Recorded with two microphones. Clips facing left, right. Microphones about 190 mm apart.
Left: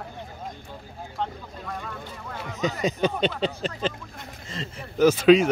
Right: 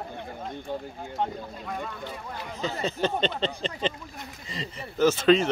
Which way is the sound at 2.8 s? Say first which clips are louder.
Left 2 dB; 10° left (ahead or behind).